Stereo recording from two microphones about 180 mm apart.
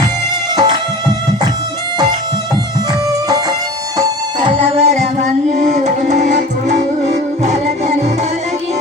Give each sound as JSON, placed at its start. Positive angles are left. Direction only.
{"t": 0.5, "sound": "music", "side_deg": -20}
{"t": 3.1, "sound": "music", "side_deg": -20}